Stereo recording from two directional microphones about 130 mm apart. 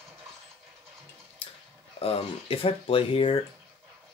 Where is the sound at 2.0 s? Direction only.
50° left (ahead or behind).